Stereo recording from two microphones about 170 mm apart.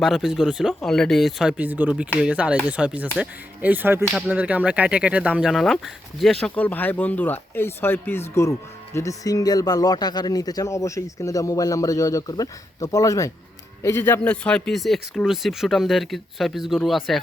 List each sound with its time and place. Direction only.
0.0 s speech: centre (ahead or behind)